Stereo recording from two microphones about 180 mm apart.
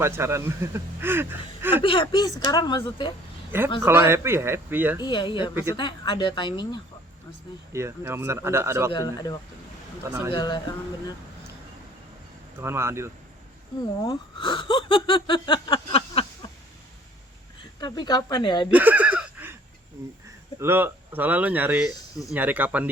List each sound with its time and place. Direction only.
0.0 s speech: 15° right (ahead or behind)
1.8 s speech: 30° left (ahead or behind)
3.5 s speech: 10° right (ahead or behind)
5.0 s speech: 25° left (ahead or behind)
7.7 s speech: 15° right (ahead or behind)
8.9 s speech: 20° left (ahead or behind)
10.1 s speech: 10° right (ahead or behind)
10.3 s speech: 25° left (ahead or behind)
12.5 s speech: 15° right (ahead or behind)
14.0 s speech: 25° left (ahead or behind)
17.7 s speech: 25° left (ahead or behind)
18.7 s a sound: 10° right (ahead or behind)
20.6 s speech: 10° right (ahead or behind)